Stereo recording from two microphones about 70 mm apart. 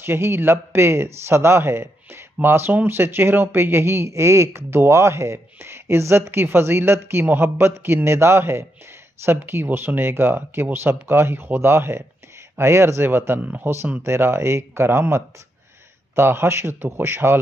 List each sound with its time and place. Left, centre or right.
0.0 s speech: right
13.4 s speech: centre
14.0 s speech: right